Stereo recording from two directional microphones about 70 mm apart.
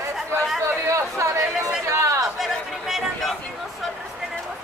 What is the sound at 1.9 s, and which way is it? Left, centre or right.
Chatter, right.